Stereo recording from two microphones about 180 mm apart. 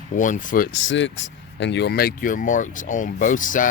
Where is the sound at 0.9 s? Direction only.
90° left; by 3.7 s 45° left (ahead or behind).